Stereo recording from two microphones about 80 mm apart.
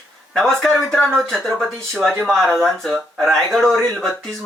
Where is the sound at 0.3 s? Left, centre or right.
Centre.